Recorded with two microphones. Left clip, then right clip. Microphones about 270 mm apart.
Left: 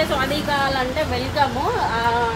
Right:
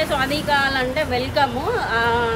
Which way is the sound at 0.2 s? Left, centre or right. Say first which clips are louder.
Right 1 dB; centre.